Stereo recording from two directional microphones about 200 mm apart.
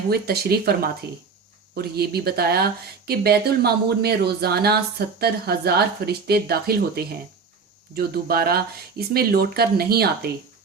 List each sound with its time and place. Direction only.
0.1 s speech: 50° right (ahead or behind)